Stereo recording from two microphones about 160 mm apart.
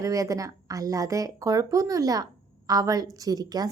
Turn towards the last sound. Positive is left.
turn(degrees=-25)  # may be behind; listen again after turning